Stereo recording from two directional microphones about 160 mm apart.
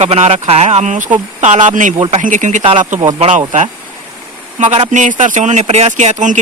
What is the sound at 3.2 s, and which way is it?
Speech, 45° right (ahead or behind).